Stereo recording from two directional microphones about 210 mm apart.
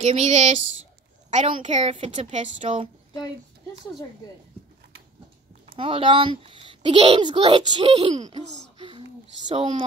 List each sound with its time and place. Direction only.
0.0 s a woman's voice: 30° right (ahead or behind)
5.8 s a child's voice: 25° right (ahead or behind)
8.7 s a sound: 25° right (ahead or behind)
9.5 s a child's voice: 25° right (ahead or behind)